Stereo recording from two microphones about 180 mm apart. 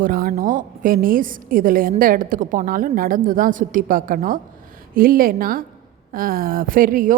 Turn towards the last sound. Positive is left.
turn(degrees=-50)  # may be behind; listen again after turning